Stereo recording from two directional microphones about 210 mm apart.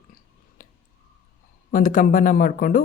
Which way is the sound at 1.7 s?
40° left (ahead or behind).